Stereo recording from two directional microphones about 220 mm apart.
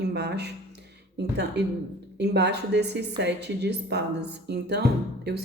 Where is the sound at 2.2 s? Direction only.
50° right (ahead or behind).